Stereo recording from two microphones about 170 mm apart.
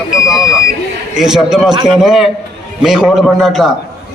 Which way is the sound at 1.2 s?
5° right (ahead or behind).